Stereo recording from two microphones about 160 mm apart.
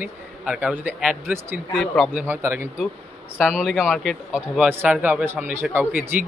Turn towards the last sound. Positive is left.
turn(degrees=-10)  # may be behind; listen again after turning